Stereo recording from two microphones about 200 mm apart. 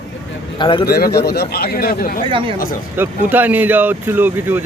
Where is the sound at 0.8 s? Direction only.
50° left (ahead or behind).